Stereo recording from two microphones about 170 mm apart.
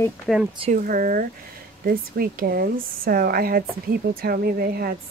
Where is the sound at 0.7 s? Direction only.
55° right (ahead or behind).